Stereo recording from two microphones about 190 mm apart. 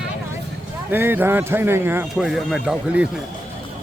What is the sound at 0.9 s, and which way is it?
Speech, 10° right (ahead or behind).